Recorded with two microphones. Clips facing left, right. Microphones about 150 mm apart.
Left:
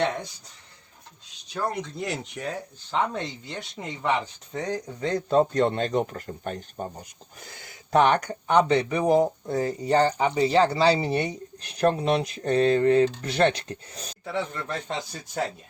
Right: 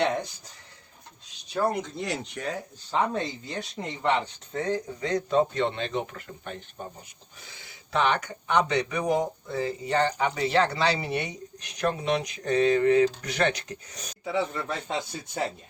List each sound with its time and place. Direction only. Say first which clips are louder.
1.7 s speech: even; centre (ahead or behind)
4.5 s speech: right 1 dB; 15° left (ahead or behind)
5.3 s speech: left 4 dB; 40° left (ahead or behind)
14.3 s speech: right 2 dB; 5° right (ahead or behind)